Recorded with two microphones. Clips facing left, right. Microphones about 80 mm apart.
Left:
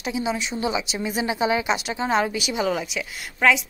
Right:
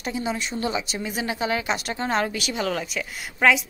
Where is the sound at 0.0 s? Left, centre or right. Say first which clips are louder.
Left 2 dB; centre.